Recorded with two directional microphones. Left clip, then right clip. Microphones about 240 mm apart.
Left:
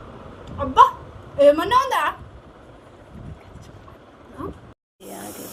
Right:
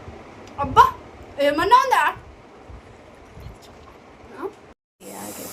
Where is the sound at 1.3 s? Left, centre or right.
Centre.